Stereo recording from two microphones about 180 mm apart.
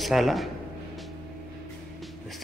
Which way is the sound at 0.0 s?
Centre (ahead or behind).